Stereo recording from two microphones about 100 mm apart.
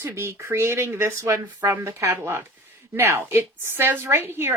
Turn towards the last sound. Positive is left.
turn(degrees=-20)  # may be behind; listen again after turning